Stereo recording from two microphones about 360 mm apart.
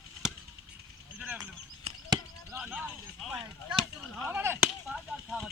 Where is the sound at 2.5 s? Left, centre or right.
Centre.